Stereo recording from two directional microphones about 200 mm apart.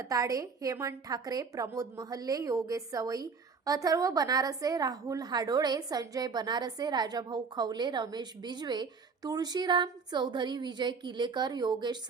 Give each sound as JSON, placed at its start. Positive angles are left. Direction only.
{"t": 0.0, "sound": "a woman's voice", "side_deg": -15}